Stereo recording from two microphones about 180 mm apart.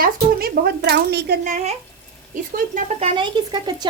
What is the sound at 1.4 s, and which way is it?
Speech, 45° right (ahead or behind).